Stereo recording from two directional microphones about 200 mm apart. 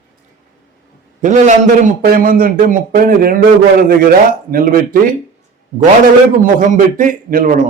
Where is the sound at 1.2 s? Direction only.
35° right (ahead or behind).